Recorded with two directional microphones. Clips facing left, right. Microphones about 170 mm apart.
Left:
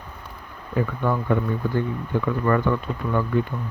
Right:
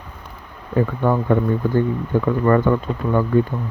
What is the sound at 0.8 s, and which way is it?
Speech, 45° right (ahead or behind).